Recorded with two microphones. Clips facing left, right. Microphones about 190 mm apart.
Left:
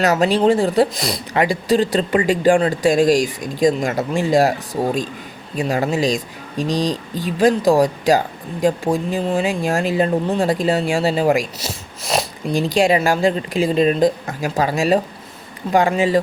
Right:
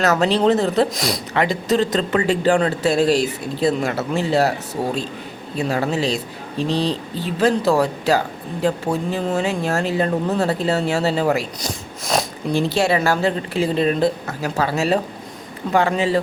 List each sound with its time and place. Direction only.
0.0 s speech: 15° left (ahead or behind)
0.9 s speech: centre (ahead or behind)
1.3 s speech: 15° left (ahead or behind)